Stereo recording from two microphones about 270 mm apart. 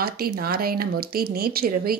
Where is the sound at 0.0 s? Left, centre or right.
Right.